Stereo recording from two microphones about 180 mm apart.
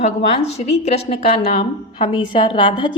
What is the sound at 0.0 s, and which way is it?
A woman's voice, 40° left (ahead or behind).